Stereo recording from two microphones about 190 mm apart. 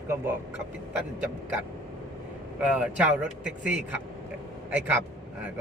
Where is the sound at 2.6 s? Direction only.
5° right (ahead or behind).